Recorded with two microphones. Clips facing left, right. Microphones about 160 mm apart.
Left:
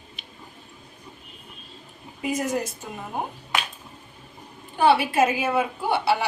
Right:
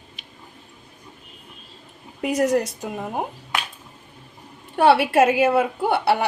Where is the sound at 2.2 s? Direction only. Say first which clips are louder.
Right 6 dB; 70° right (ahead or behind).